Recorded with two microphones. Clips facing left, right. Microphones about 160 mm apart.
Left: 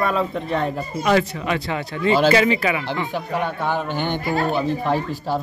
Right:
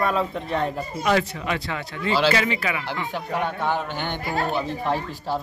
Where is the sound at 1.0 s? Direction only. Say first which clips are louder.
Left 3 dB; 45° left (ahead or behind).